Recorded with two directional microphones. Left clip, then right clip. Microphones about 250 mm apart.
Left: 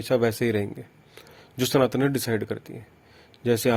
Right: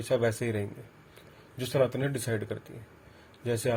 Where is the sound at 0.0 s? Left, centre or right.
Left.